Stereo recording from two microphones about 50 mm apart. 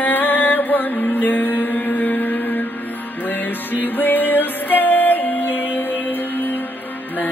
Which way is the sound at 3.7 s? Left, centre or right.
Left.